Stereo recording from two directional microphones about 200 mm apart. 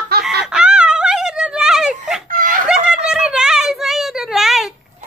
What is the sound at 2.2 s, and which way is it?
Snicker, 40° right (ahead or behind).